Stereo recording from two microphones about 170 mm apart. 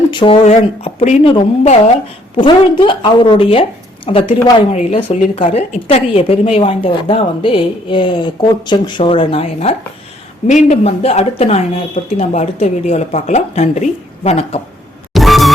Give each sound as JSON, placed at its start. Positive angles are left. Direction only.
{"t": 0.1, "sound": "speech", "side_deg": 30}
{"t": 15.1, "sound": "music", "side_deg": 0}